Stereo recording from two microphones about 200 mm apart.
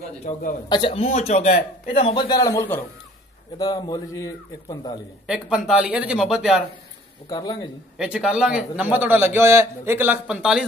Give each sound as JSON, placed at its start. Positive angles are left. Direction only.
{"t": 0.2, "sound": "a man's voice", "side_deg": 40}
{"t": 0.7, "sound": "speech", "side_deg": 25}
{"t": 5.2, "sound": "speech", "side_deg": -5}
{"t": 7.2, "sound": "speech", "side_deg": 20}
{"t": 8.0, "sound": "a man's voice", "side_deg": -5}